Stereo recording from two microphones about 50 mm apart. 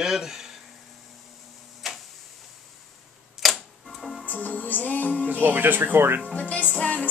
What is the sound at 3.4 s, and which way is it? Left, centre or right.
Music, centre.